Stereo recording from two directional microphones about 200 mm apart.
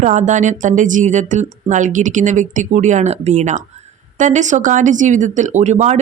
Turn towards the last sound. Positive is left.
turn(degrees=-35)  # may be behind; listen again after turning